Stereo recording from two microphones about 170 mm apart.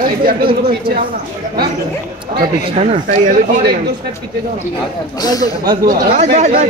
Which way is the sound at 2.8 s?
40° right (ahead or behind).